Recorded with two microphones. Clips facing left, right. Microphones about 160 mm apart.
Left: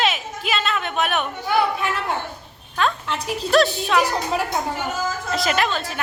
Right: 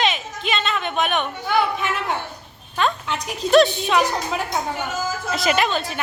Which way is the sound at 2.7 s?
Centre (ahead or behind).